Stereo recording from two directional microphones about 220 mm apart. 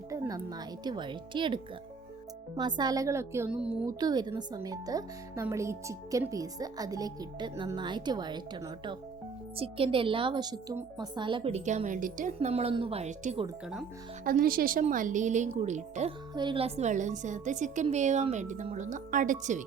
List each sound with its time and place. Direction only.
0.1 s a woman's voice: 15° right (ahead or behind)
4.0 s a woman's voice: 20° right (ahead or behind)
14.3 s a woman's voice: 40° right (ahead or behind)
16.3 s a woman's voice: 20° right (ahead or behind)